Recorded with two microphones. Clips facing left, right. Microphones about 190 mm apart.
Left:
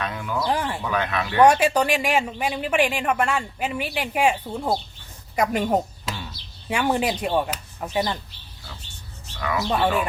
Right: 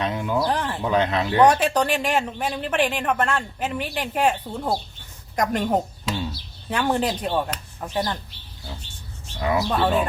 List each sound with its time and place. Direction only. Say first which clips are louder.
0.0 s speech: right 4 dB; 25° right (ahead or behind)
0.5 s speech: left 1 dB; 10° left (ahead or behind)
0.8 s speech: right 4 dB; 25° right (ahead or behind)
1.4 s speech: left 1 dB; 10° left (ahead or behind)
9.4 s speech: right 3 dB; 25° right (ahead or behind)
9.6 s speech: left 4 dB; 10° left (ahead or behind)